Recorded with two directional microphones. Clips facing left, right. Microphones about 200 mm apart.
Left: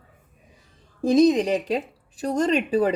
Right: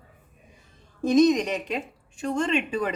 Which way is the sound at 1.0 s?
30° left (ahead or behind).